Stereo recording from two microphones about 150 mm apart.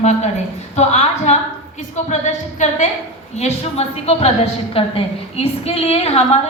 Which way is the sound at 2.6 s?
55° left (ahead or behind).